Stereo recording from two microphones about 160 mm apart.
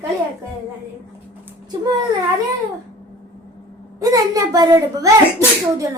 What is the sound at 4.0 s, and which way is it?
A woman's voice, 20° right (ahead or behind).